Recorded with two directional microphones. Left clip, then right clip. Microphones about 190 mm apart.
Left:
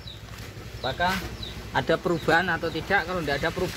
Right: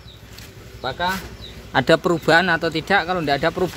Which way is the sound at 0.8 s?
55° right (ahead or behind).